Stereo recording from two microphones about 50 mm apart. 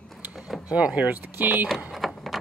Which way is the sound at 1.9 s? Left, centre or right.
Centre.